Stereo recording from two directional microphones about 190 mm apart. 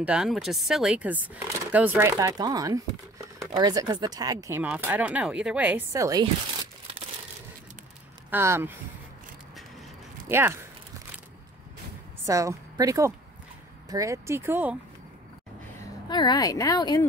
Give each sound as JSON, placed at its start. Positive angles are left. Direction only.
{"t": 0.0, "sound": "speech", "side_deg": -5}
{"t": 8.3, "sound": "speech", "side_deg": -10}
{"t": 10.2, "sound": "speech", "side_deg": -15}
{"t": 12.3, "sound": "speech", "side_deg": -15}
{"t": 16.1, "sound": "speech", "side_deg": 25}